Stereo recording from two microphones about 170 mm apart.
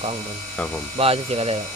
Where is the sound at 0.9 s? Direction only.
35° right (ahead or behind).